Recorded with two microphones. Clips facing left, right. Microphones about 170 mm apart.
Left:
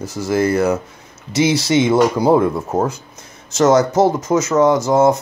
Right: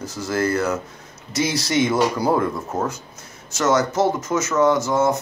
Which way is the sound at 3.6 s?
35° left (ahead or behind).